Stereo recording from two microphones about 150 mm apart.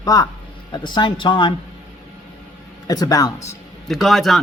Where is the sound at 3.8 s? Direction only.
Centre (ahead or behind).